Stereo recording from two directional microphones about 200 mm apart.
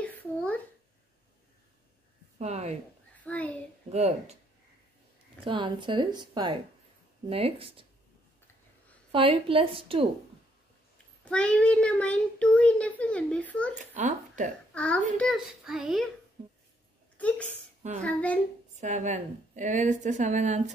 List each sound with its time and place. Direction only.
0.0 s a sound: 10° left (ahead or behind)
2.3 s speech: 30° right (ahead or behind)
3.3 s a sound: 5° left (ahead or behind)
3.9 s a woman's voice: 30° right (ahead or behind)
5.4 s a woman's voice: 25° right (ahead or behind)
9.1 s a woman's voice: 25° right (ahead or behind)
11.2 s a child's voice: 5° left (ahead or behind)
13.7 s a woman's voice: 40° right (ahead or behind)
14.7 s a child's voice: 5° left (ahead or behind)
16.4 s a sound: 30° right (ahead or behind)
17.2 s a child's voice: 5° left (ahead or behind)
18.8 s a woman's voice: 35° right (ahead or behind)